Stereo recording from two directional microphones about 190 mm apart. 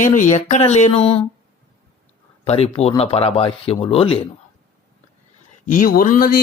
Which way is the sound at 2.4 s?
30° left (ahead or behind).